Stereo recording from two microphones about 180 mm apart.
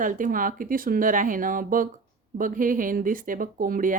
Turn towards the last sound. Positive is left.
turn(degrees=-50)  # may be behind; listen again after turning